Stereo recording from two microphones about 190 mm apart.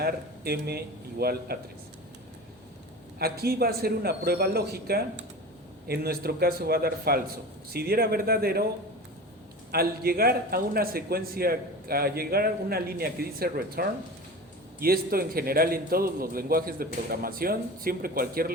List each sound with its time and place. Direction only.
0.0 s a man's voice: 55° right (ahead or behind)
3.2 s a man's voice: 55° right (ahead or behind)
9.7 s a man's voice: 55° right (ahead or behind)